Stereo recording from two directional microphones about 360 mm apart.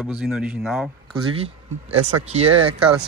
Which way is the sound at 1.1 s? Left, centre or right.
Centre.